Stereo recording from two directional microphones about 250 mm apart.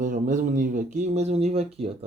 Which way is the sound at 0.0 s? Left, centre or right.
Right.